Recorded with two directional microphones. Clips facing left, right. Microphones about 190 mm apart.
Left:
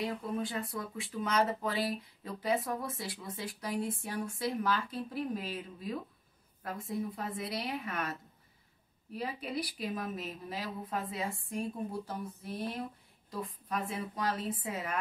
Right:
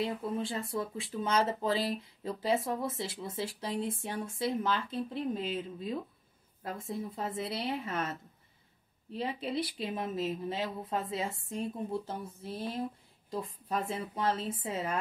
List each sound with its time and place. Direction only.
0.0 s speech: 25° right (ahead or behind)